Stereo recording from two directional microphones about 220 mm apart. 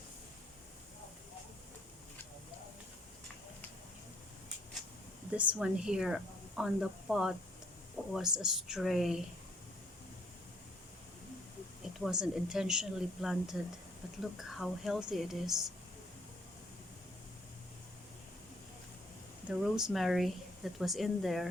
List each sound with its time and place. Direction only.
5.3 s a woman's voice: 5° right (ahead or behind)
11.9 s a woman's voice: centre (ahead or behind)
19.5 s a woman's voice: centre (ahead or behind)